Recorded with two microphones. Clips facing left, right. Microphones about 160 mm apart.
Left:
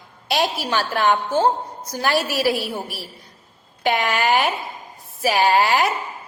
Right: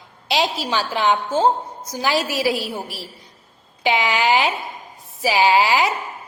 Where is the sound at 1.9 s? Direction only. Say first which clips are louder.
Even; 10° right (ahead or behind).